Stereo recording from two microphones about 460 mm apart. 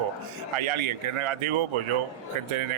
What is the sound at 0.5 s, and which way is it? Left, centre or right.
Speech, right.